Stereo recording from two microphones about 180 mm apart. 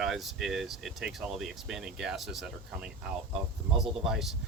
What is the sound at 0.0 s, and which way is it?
Speech, centre (ahead or behind).